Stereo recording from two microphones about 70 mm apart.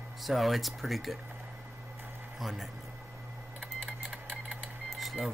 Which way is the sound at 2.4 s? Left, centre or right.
Centre.